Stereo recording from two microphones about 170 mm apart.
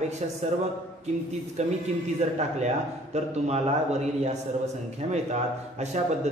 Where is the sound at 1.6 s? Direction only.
40° right (ahead or behind).